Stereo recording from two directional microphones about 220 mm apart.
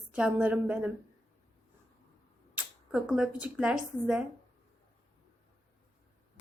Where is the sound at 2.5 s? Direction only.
5° right (ahead or behind).